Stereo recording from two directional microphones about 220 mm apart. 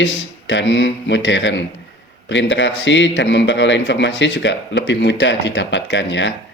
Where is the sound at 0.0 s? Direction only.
55° left (ahead or behind).